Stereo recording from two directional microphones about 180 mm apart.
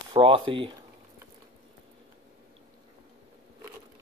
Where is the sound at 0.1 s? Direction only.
30° right (ahead or behind).